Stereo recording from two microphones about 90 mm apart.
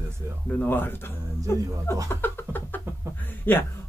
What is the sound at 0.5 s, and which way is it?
Speech, 20° left (ahead or behind).